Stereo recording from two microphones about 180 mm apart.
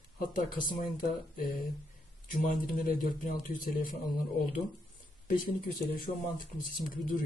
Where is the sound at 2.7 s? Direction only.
50° left (ahead or behind).